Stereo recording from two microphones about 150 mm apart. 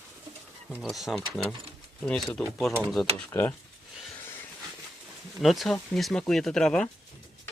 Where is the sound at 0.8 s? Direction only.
Centre (ahead or behind).